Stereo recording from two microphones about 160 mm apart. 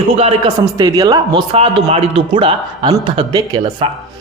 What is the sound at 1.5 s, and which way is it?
A man's voice, 40° right (ahead or behind).